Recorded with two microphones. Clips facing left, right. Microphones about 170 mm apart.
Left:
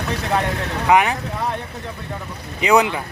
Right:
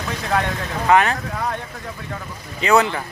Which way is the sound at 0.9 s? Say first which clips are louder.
Even; 15° left (ahead or behind).